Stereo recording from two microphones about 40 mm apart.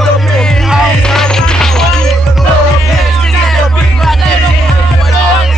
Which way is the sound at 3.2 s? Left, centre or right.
Centre.